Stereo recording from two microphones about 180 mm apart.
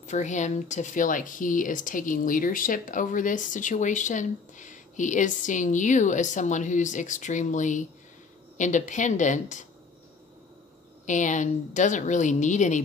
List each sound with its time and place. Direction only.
0.0 s speech: 40° left (ahead or behind)
11.1 s speech: 45° left (ahead or behind)